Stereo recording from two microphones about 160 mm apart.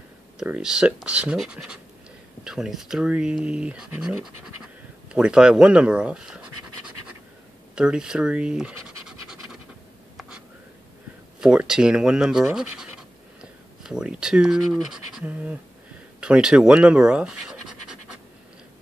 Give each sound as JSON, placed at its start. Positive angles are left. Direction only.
{"t": 0.4, "sound": "speech", "side_deg": -5}
{"t": 7.7, "sound": "speech", "side_deg": -5}
{"t": 11.4, "sound": "speech", "side_deg": -5}
{"t": 12.5, "sound": "scratch", "side_deg": -5}
{"t": 13.8, "sound": "speech", "side_deg": -5}
{"t": 16.2, "sound": "scratch", "side_deg": -5}